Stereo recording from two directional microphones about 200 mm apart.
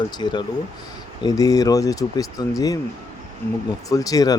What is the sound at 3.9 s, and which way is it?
Speech, 15° left (ahead or behind).